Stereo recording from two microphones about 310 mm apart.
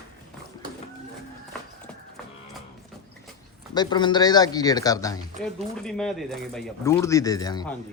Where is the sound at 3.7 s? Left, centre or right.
Centre.